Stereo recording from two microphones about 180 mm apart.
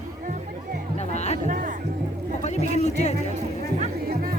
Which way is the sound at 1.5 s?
45° right (ahead or behind).